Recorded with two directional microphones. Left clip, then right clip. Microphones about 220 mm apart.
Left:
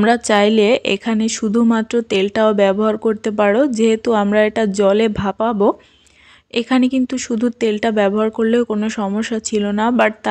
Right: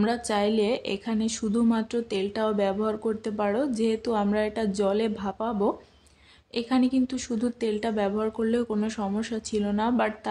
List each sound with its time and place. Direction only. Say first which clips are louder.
0.0 s speech: left 12 dB; 30° left (ahead or behind)